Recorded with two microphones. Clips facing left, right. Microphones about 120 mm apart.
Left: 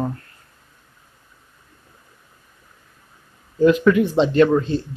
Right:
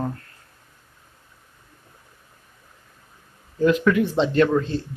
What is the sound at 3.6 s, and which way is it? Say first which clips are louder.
Speech: left 4 dB; 15° left (ahead or behind).